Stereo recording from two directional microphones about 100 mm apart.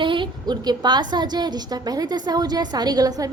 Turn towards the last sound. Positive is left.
turn(degrees=-40)  # may be behind; listen again after turning